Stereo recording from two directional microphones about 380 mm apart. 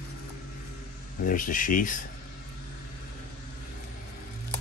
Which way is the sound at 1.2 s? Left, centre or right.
Left.